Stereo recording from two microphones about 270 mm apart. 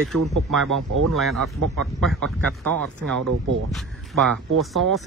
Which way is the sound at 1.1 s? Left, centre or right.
Centre.